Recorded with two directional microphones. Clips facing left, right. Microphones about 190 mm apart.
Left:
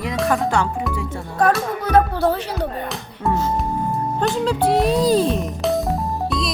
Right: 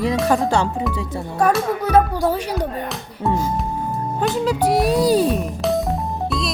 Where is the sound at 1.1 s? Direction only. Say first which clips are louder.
Even; 10° right (ahead or behind).